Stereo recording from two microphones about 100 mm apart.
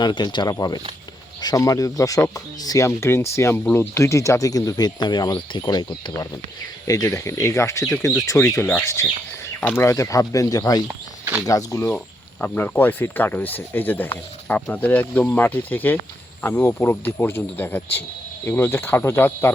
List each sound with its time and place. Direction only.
0.0 s speech: 45° left (ahead or behind)
10.8 s a sound: 15° right (ahead or behind)
11.4 s speech: 35° left (ahead or behind)
11.9 s speech: 20° left (ahead or behind)